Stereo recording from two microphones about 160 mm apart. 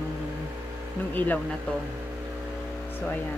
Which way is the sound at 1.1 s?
10° left (ahead or behind).